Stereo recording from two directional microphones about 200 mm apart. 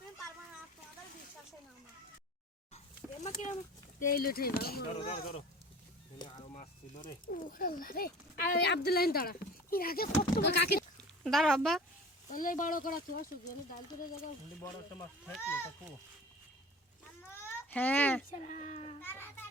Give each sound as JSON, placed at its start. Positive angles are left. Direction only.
{"t": 2.7, "sound": "a sound", "side_deg": 35}
{"t": 4.0, "sound": "speech", "side_deg": 50}
{"t": 4.9, "sound": "speech", "side_deg": 30}
{"t": 6.5, "sound": "speech", "side_deg": 40}
{"t": 11.2, "sound": "speech", "side_deg": 0}
{"t": 12.3, "sound": "speech", "side_deg": 45}
{"t": 15.4, "sound": "speech", "side_deg": 10}
{"t": 17.3, "sound": "baby cry", "side_deg": 10}
{"t": 18.3, "sound": "speech", "side_deg": 35}
{"t": 19.0, "sound": "child singing", "side_deg": 10}